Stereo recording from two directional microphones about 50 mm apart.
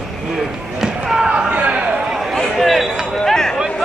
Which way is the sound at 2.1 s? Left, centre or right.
Centre.